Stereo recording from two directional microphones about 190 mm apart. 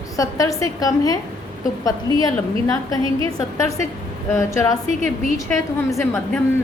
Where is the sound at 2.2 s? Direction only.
20° left (ahead or behind).